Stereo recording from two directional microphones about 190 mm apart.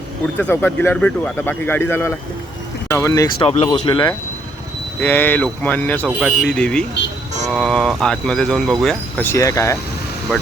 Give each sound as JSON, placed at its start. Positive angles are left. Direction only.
{"t": 0.3, "sound": "speech", "side_deg": 10}
{"t": 3.4, "sound": "speech", "side_deg": 30}
{"t": 4.9, "sound": "speech", "side_deg": 10}
{"t": 6.1, "sound": "speech", "side_deg": -5}